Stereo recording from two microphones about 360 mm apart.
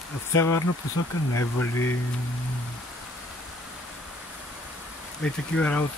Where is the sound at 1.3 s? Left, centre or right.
Left.